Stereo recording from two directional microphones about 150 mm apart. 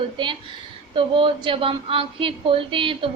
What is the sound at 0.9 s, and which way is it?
A woman's voice, 35° right (ahead or behind).